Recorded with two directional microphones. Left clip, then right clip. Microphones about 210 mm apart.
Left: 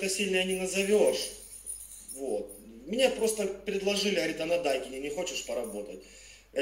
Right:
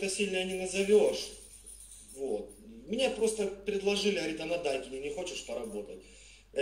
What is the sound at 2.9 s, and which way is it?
Speech, 25° left (ahead or behind).